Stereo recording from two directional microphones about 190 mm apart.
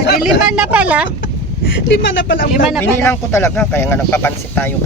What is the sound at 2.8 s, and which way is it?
Speech, 15° left (ahead or behind).